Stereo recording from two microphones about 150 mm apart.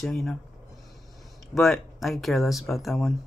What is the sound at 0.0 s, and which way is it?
Speech, 5° left (ahead or behind).